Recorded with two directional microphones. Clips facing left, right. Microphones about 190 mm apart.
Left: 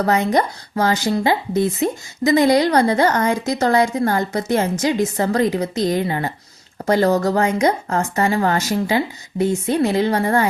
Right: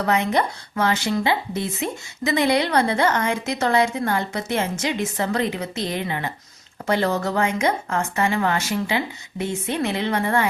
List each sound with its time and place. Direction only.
0.0 s a woman's voice: 40° left (ahead or behind)